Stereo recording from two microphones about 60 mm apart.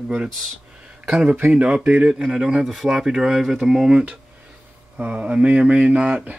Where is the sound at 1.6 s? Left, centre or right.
Right.